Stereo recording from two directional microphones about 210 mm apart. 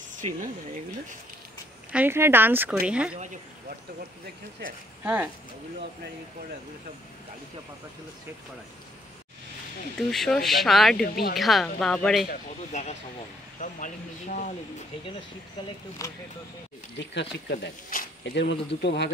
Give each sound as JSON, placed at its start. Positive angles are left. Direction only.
{"t": 0.2, "sound": "speech", "side_deg": -35}
{"t": 1.9, "sound": "speech", "side_deg": -10}
{"t": 5.0, "sound": "speech", "side_deg": -5}
{"t": 9.9, "sound": "speech", "side_deg": 0}
{"t": 12.3, "sound": "speech", "side_deg": 35}
{"t": 16.0, "sound": "speech", "side_deg": 15}
{"t": 17.1, "sound": "speech", "side_deg": 55}